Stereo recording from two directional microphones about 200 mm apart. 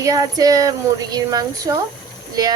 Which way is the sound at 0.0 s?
15° right (ahead or behind).